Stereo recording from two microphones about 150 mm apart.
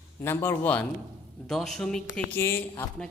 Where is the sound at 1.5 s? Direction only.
Centre (ahead or behind).